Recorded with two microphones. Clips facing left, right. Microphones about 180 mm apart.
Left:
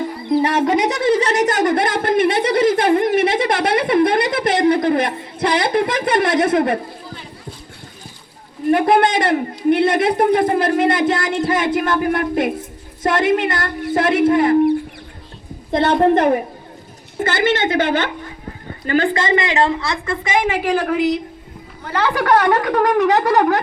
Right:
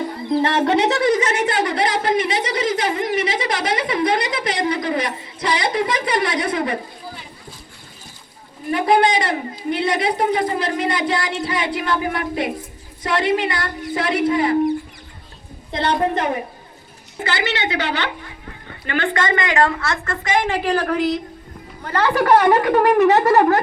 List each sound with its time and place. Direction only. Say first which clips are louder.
0.3 s a woman's voice: left 2 dB; 10° left (ahead or behind); by 6.7 s 55° left (ahead or behind)
8.7 s a woman's voice: left 2 dB; 55° left (ahead or behind)
15.7 s a woman's voice: left 6 dB; 50° left (ahead or behind)
18.7 s a woman's voice: left 5 dB; 35° left (ahead or behind); by 21.1 s 10° left (ahead or behind)
22.0 s speech: right 1 dB; 5° right (ahead or behind)